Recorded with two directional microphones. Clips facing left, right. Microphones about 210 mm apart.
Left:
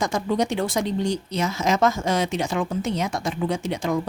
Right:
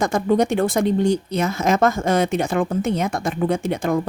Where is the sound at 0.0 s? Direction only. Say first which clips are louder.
Right 5 dB; 55° right (ahead or behind).